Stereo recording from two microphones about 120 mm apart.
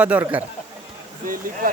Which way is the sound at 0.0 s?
15° right (ahead or behind).